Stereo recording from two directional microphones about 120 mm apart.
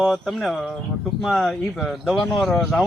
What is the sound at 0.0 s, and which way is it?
Speech, centre (ahead or behind).